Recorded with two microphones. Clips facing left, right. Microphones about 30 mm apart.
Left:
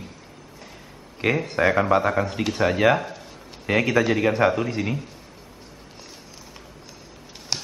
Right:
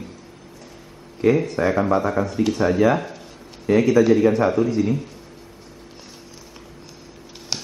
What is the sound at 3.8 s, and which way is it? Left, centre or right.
A man's voice, left.